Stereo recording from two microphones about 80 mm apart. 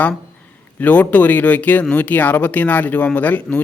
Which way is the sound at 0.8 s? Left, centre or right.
Centre.